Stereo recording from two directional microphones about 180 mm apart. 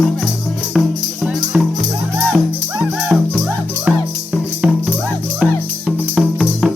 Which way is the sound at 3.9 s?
10° right (ahead or behind).